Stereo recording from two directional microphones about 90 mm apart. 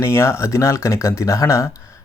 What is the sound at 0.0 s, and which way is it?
Speech, 30° left (ahead or behind).